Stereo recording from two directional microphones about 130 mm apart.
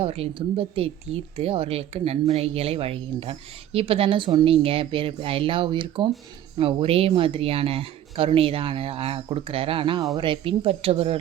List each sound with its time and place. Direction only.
0.0 s speech: 45° right (ahead or behind)